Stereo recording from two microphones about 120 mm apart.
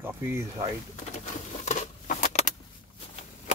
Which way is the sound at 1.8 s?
90° left.